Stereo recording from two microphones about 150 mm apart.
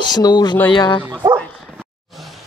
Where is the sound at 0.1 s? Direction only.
25° left (ahead or behind).